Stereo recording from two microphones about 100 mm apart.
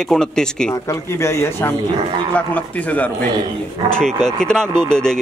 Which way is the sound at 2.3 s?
15° left (ahead or behind).